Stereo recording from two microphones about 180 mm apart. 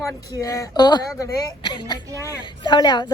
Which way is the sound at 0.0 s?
20° left (ahead or behind).